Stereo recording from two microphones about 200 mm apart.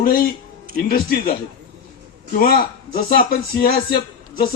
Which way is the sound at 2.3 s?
45° left (ahead or behind).